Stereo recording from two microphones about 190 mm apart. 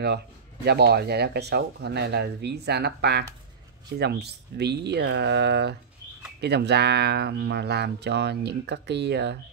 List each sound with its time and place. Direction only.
0.7 s speech: 60° right (ahead or behind)